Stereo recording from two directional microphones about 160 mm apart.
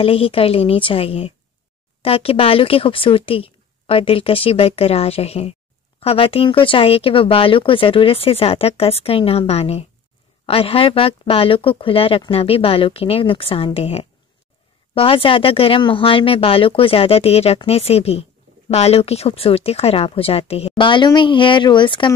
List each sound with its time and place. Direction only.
0.0 s speech: 35° left (ahead or behind)